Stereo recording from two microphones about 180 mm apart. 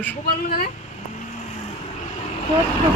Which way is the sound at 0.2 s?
55° left (ahead or behind).